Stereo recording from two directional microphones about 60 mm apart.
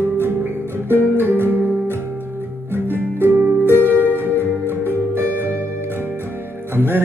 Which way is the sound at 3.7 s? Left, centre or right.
Right.